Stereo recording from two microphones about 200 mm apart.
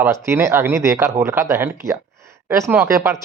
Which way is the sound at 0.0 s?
10° right (ahead or behind).